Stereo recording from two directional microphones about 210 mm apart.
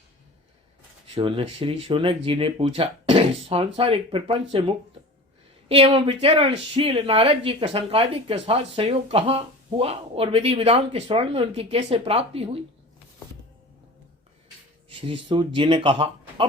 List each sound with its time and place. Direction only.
1.0 s speech: 25° right (ahead or behind)
5.6 s speech: 25° right (ahead or behind)
14.8 s speech: 25° right (ahead or behind)